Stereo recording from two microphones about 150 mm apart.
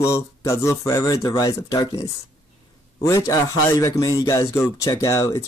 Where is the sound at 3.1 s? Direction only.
20° left (ahead or behind).